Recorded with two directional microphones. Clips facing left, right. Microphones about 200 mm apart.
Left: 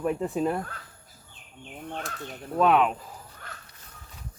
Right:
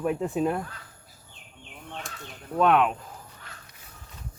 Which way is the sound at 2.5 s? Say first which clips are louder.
Even; centre (ahead or behind).